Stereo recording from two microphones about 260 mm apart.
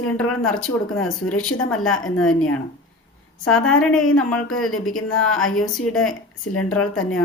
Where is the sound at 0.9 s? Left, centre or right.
Left.